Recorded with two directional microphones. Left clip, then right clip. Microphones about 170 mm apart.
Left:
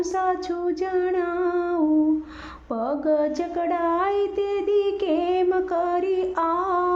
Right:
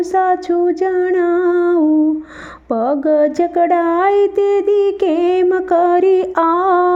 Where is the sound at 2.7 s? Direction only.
40° right (ahead or behind).